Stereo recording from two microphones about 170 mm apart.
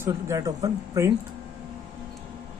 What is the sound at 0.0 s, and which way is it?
Speech, 20° right (ahead or behind).